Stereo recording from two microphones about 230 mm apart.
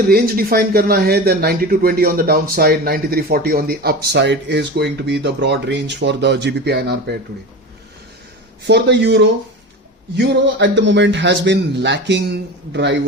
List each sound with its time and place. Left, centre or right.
0.1 s speech: right
8.6 s speech: right